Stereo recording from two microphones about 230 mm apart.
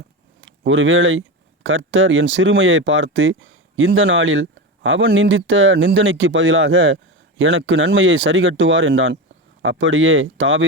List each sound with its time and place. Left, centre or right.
0.4 s speech: right